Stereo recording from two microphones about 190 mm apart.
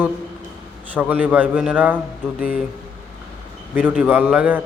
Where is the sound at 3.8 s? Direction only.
10° right (ahead or behind).